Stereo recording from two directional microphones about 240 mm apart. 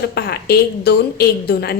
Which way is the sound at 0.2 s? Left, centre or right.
Left.